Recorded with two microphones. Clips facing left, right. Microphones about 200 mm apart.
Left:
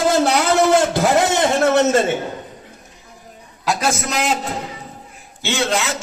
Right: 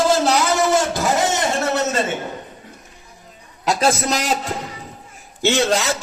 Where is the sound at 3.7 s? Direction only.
30° right (ahead or behind).